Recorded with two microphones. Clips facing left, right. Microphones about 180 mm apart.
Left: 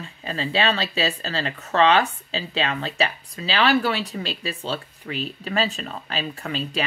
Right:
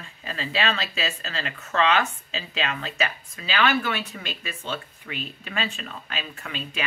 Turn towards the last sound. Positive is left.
turn(degrees=35)  # may be behind; listen again after turning